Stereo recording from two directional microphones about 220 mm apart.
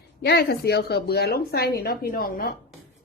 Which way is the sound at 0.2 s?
45° left (ahead or behind).